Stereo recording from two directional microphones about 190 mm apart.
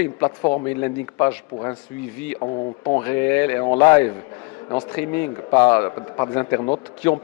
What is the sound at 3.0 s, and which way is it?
A man's voice, 10° left (ahead or behind).